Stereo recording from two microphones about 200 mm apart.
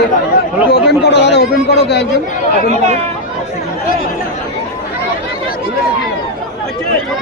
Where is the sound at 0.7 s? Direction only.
55° left (ahead or behind).